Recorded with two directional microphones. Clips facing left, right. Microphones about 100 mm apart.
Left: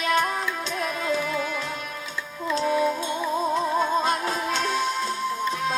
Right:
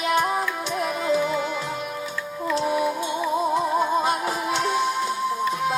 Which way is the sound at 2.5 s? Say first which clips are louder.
Even; 15° right (ahead or behind).